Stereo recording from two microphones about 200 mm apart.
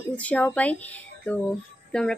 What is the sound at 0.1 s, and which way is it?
Speech, 5° left (ahead or behind).